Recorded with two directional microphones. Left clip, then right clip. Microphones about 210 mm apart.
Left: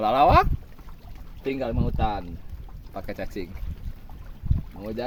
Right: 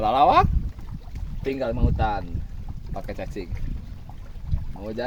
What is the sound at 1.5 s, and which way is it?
Speech, 15° left (ahead or behind).